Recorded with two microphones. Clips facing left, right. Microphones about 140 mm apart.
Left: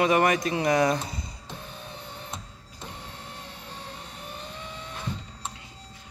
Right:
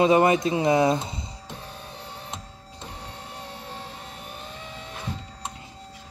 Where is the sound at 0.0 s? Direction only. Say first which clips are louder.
Right 4 dB; 25° right (ahead or behind).